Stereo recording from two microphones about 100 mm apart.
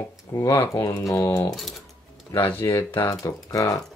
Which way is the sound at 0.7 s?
30° left (ahead or behind).